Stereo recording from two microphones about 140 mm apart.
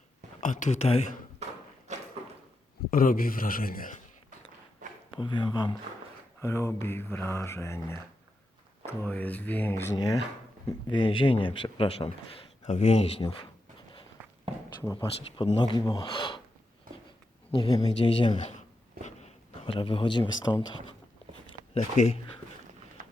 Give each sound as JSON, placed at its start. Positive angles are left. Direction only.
{"t": 0.4, "sound": "speech", "side_deg": 65}
{"t": 1.9, "sound": "a sound", "side_deg": -55}
{"t": 2.9, "sound": "speech", "side_deg": 90}
{"t": 5.1, "sound": "speech", "side_deg": 35}
{"t": 6.4, "sound": "speech", "side_deg": 20}
{"t": 10.7, "sound": "speech", "side_deg": 35}
{"t": 14.9, "sound": "speech", "side_deg": 35}
{"t": 17.5, "sound": "speech", "side_deg": 40}
{"t": 17.7, "sound": "speech", "side_deg": 50}
{"t": 21.8, "sound": "speech", "side_deg": 50}